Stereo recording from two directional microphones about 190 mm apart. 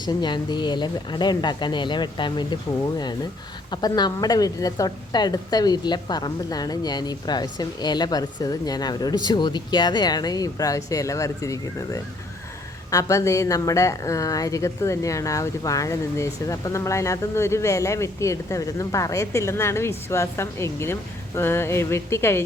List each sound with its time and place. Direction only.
0.0 s a woman's voice: 25° left (ahead or behind)
3.7 s a woman's voice: 20° left (ahead or behind)